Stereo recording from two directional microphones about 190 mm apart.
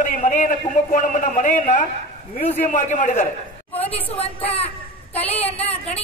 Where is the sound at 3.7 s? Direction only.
10° left (ahead or behind).